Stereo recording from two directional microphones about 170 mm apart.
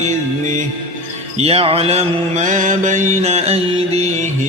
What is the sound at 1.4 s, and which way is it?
Mantra, 35° right (ahead or behind).